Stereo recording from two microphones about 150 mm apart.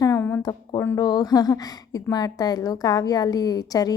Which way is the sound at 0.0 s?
20° left (ahead or behind).